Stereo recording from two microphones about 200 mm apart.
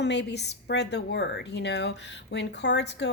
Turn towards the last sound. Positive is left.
turn(degrees=60)  # may be behind; listen again after turning